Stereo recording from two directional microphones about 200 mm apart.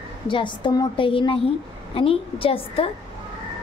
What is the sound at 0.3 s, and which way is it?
A woman's voice, 25° left (ahead or behind).